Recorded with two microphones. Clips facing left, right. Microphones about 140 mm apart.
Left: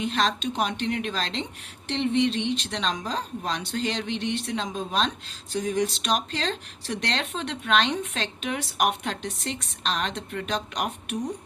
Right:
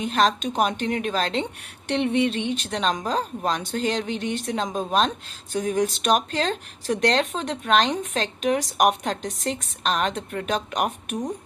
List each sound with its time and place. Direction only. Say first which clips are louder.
0.0 s speech: right 4 dB; 45° right (ahead or behind)